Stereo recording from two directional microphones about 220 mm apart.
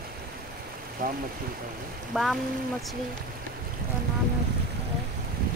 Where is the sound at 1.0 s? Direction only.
40° right (ahead or behind).